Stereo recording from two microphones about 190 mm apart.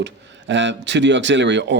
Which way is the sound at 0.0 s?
70° right (ahead or behind).